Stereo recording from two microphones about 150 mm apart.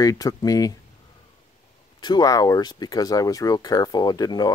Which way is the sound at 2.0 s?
25° left (ahead or behind).